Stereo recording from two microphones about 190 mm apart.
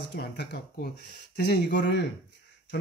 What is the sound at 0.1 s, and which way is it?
Speech, 60° left (ahead or behind).